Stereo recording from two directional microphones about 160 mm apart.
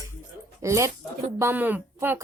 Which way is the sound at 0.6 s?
20° right (ahead or behind).